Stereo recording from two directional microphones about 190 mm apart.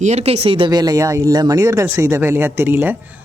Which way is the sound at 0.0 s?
35° right (ahead or behind).